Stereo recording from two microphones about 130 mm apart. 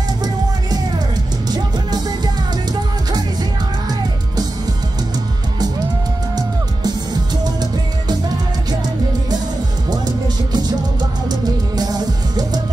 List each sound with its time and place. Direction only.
0.2 s music: 30° right (ahead or behind)
9.8 s music: 30° right (ahead or behind)